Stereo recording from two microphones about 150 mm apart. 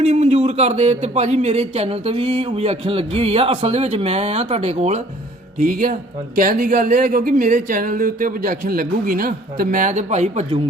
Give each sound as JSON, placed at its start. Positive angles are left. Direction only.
{"t": 0.0, "sound": "speech", "side_deg": -45}
{"t": 5.5, "sound": "speech", "side_deg": -65}